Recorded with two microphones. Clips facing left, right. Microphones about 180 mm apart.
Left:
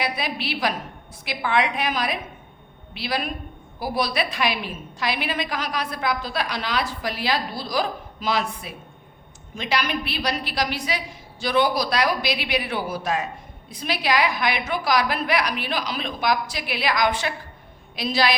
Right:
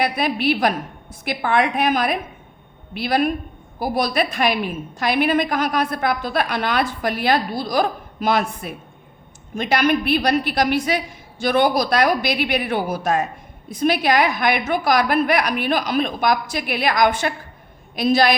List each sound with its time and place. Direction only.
0.0 s a woman's voice: 50° right (ahead or behind)